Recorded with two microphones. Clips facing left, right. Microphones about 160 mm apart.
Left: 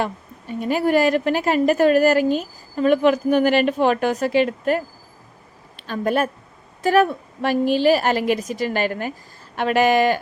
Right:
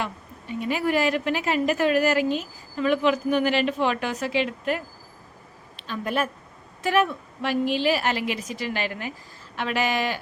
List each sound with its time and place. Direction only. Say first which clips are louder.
0.0 s a woman's voice: left 6 dB; 45° left (ahead or behind)